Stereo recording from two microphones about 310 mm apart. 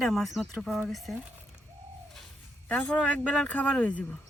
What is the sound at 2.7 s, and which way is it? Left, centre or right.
Speech, centre.